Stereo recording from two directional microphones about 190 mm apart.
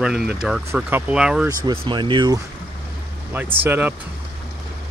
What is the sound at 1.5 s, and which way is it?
Speech, 20° right (ahead or behind).